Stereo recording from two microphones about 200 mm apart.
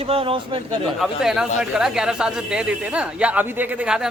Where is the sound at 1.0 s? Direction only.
Centre (ahead or behind).